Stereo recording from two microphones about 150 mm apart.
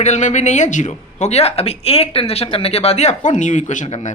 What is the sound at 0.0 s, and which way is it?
Speech, 50° left (ahead or behind).